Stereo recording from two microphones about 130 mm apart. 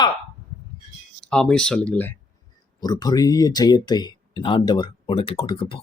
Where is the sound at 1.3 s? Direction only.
5° left (ahead or behind).